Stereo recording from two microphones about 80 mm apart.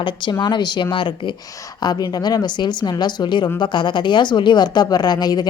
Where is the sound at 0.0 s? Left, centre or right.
Left.